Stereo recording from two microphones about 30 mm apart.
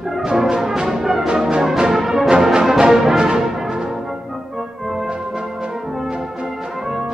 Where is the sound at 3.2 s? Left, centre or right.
Centre.